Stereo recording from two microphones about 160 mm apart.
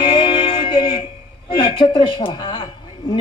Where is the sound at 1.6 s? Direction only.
30° left (ahead or behind).